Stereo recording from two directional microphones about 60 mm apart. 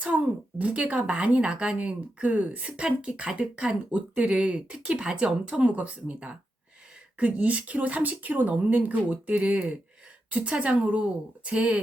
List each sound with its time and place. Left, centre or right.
0.6 s speech: right